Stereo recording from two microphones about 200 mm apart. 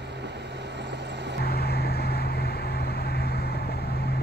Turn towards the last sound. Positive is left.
turn(degrees=55)  # may be behind; listen again after turning